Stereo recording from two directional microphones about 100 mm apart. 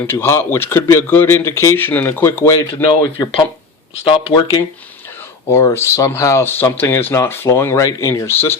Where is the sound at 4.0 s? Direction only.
70° left (ahead or behind).